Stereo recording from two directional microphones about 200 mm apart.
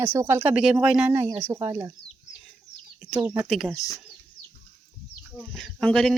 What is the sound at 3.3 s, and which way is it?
Speech, centre (ahead or behind).